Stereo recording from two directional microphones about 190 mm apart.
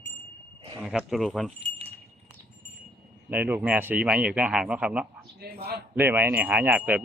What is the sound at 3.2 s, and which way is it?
Speech, 10° right (ahead or behind).